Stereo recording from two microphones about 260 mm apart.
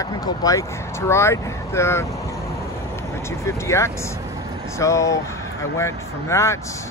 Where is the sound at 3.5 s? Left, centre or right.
Centre.